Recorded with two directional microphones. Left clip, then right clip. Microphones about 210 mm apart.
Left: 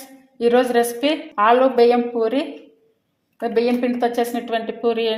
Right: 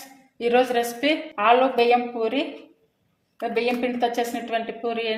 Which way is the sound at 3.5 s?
25° left (ahead or behind).